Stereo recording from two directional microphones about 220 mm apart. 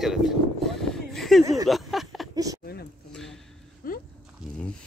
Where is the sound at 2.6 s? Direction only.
45° left (ahead or behind).